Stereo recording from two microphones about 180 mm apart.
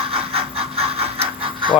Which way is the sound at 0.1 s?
30° right (ahead or behind).